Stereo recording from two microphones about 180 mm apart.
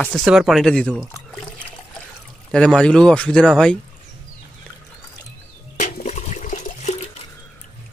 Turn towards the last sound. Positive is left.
turn(degrees=40)  # may be behind; listen again after turning